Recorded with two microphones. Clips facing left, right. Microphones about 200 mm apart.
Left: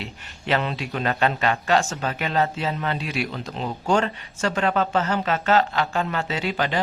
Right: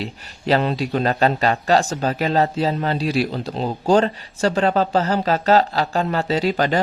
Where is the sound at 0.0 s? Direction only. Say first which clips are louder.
Right 7 dB; 35° right (ahead or behind).